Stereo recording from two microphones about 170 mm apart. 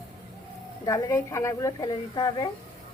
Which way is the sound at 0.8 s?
20° left (ahead or behind).